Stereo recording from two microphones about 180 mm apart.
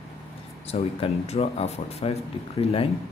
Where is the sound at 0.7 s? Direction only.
35° left (ahead or behind).